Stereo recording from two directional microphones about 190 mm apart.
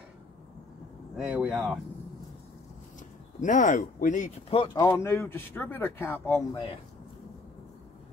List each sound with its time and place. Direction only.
1.1 s speech: 5° right (ahead or behind)
3.3 s speech: 40° left (ahead or behind)
4.8 s speech: 15° left (ahead or behind)
6.5 s speech: 25° left (ahead or behind)